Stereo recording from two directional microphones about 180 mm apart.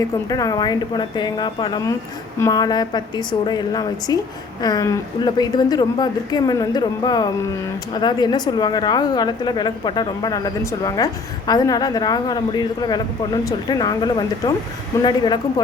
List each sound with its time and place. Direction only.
0.3 s a woman's voice: 20° left (ahead or behind)